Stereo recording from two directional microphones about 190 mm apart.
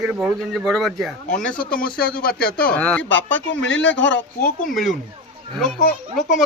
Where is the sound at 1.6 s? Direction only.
50° left (ahead or behind).